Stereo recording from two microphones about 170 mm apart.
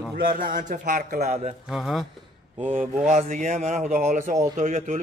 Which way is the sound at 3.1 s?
45° right (ahead or behind).